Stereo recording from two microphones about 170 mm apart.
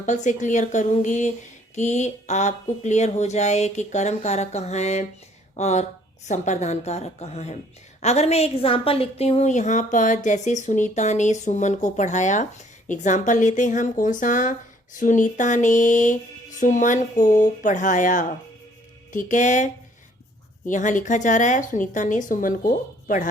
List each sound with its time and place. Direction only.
0.0 s a woman's voice: 45° left (ahead or behind)